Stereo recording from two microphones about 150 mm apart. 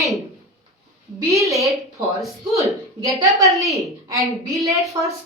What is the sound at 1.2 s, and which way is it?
Speech, 20° right (ahead or behind).